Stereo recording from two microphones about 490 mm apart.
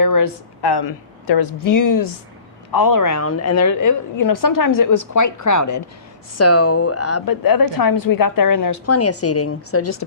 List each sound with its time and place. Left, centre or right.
0.0 s a woman's voice: left
7.3 s a woman's voice: left